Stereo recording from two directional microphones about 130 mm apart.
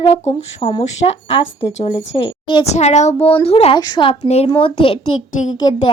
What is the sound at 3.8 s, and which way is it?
Speech, 35° left (ahead or behind).